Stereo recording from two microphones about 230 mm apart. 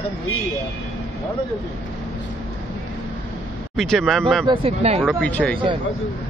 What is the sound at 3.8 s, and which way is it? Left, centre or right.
Speech, centre.